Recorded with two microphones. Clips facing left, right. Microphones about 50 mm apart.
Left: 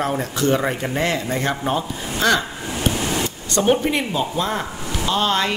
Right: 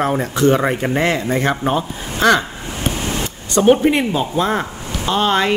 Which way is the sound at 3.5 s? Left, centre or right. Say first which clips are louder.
Right 6 dB; right.